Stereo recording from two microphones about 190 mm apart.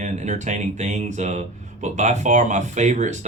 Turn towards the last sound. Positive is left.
turn(degrees=-40)  # may be behind; listen again after turning